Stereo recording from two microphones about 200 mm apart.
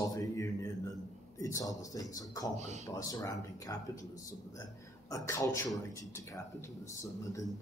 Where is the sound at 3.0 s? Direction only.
20° left (ahead or behind).